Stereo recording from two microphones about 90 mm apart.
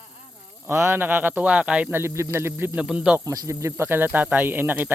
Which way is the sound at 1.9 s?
30° right (ahead or behind).